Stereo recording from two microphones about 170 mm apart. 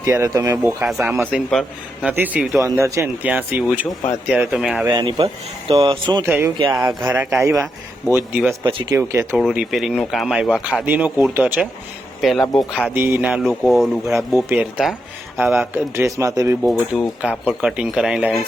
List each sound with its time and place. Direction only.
0.0 s speech: 15° right (ahead or behind)
0.6 s speech: 5° right (ahead or behind)
1.5 s speech: centre (ahead or behind)
2.1 s speech: 10° right (ahead or behind)
2.6 s speech: 15° right (ahead or behind)
4.9 s speech: 25° right (ahead or behind)
6.2 s speech: 10° right (ahead or behind)
12.2 s speech: centre (ahead or behind)
12.9 s speech: 10° right (ahead or behind)
17.2 s speech: 5° right (ahead or behind)